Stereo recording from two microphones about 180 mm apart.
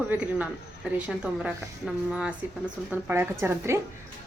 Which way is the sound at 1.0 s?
5° right (ahead or behind).